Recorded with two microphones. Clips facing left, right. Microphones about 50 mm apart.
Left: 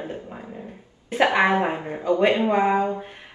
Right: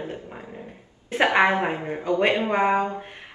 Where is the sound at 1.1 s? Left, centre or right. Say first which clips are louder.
Even; right.